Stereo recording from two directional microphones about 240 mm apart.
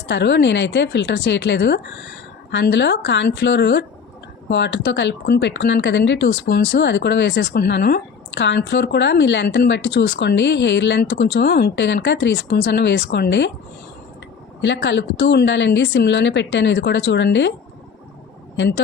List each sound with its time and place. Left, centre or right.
0.1 s speech: left
14.6 s speech: left
18.5 s speech: left